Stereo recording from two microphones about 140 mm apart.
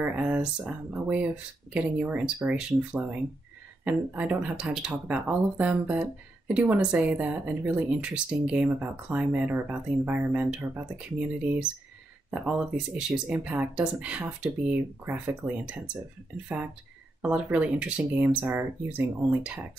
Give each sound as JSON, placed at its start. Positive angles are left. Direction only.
{"t": 0.0, "sound": "speech", "side_deg": -10}